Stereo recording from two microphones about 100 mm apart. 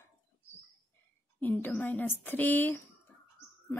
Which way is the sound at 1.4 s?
20° left (ahead or behind).